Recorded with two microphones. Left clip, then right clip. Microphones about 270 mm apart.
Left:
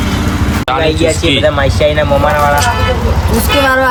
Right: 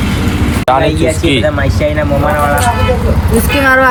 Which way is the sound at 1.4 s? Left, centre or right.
Left.